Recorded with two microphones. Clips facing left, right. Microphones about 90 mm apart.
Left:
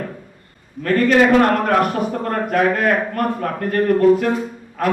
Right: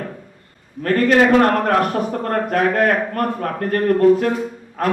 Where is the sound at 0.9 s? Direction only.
40° right (ahead or behind).